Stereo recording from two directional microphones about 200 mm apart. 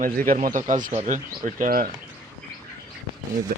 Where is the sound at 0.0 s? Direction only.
45° right (ahead or behind).